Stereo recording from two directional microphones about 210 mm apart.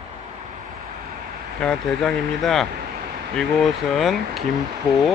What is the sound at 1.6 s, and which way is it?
Speech, 5° left (ahead or behind).